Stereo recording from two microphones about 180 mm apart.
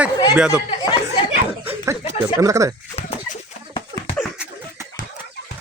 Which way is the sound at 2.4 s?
15° right (ahead or behind).